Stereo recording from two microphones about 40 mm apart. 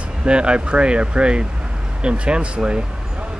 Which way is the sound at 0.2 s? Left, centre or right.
Right.